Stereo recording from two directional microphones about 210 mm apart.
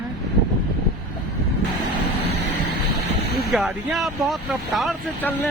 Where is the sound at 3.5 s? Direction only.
Centre (ahead or behind).